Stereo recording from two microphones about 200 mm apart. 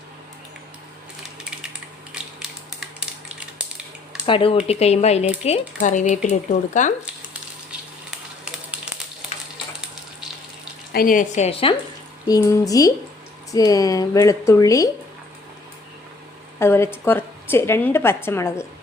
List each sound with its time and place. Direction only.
2.4 s a sound: 5° right (ahead or behind)
4.3 s a woman's voice: 25° left (ahead or behind)
10.9 s a woman's voice: 45° left (ahead or behind)
12.3 s a woman's voice: 15° left (ahead or behind)
16.6 s a woman's voice: 10° left (ahead or behind)